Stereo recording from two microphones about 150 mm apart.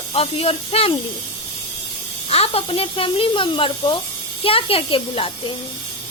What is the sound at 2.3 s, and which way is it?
Speech, 40° left (ahead or behind).